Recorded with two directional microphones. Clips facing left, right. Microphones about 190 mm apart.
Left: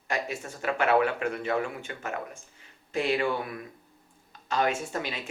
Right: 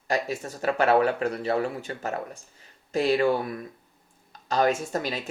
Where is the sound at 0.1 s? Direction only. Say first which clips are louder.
Right 4 dB; 35° right (ahead or behind).